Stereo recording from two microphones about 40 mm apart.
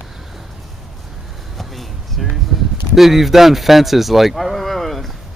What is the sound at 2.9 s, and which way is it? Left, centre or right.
Speech, centre.